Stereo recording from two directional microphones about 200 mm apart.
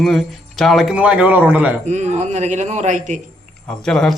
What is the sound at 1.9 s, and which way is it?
A man's voice, 35° right (ahead or behind).